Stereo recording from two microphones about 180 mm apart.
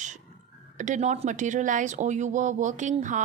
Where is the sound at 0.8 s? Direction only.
40° right (ahead or behind).